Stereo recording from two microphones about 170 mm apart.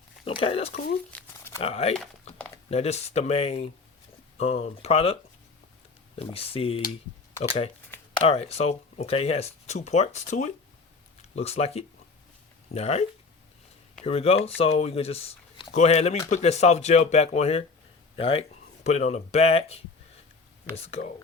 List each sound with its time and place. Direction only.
0.3 s speech: 35° left (ahead or behind)
1.1 s a sound: 10° left (ahead or behind)
1.6 s speech: 35° left (ahead or behind)
6.1 s speech: 35° left (ahead or behind)
7.9 s shuffling cards: 10° left (ahead or behind)
8.3 s speech: 35° left (ahead or behind)